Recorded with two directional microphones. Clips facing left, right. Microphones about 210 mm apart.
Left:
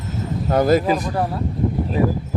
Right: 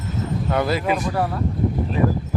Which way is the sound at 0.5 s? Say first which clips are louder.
Left 6 dB; 40° left (ahead or behind).